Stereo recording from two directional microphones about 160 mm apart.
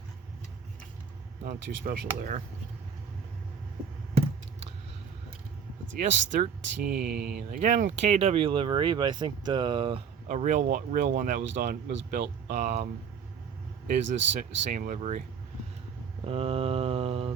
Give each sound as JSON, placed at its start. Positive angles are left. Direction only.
{"t": 1.5, "sound": "speech", "side_deg": -60}
{"t": 6.0, "sound": "speech", "side_deg": -55}
{"t": 7.3, "sound": "speech", "side_deg": -60}
{"t": 10.2, "sound": "speech", "side_deg": -50}
{"t": 14.2, "sound": "speech", "side_deg": -90}
{"t": 14.7, "sound": "speech", "side_deg": -55}
{"t": 16.2, "sound": "speech", "side_deg": -35}